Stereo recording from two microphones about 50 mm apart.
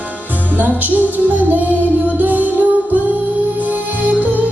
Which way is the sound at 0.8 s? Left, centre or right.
Right.